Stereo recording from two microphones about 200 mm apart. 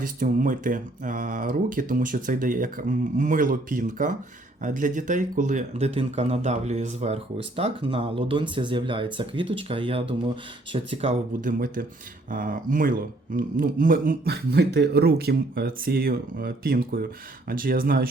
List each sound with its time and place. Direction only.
0.0 s speech: 40° right (ahead or behind)